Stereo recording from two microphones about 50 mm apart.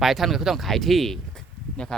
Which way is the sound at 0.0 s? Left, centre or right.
Centre.